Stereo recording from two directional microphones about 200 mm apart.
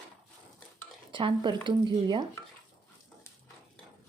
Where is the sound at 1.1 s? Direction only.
25° right (ahead or behind).